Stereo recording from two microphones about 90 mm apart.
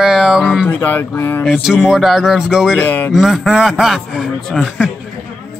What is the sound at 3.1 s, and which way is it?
Speech, 5° right (ahead or behind).